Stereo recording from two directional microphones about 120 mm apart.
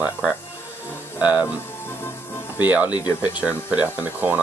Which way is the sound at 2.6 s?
15° right (ahead or behind).